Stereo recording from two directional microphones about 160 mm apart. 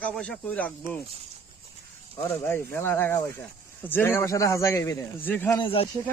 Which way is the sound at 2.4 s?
15° left (ahead or behind).